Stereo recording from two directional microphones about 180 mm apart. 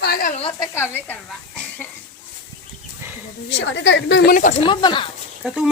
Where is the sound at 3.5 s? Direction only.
75° left (ahead or behind); by 4.5 s 55° left (ahead or behind).